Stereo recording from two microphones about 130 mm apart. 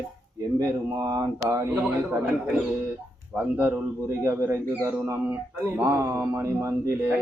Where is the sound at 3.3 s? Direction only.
15° right (ahead or behind).